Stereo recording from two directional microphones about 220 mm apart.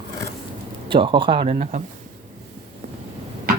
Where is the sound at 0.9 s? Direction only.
25° right (ahead or behind).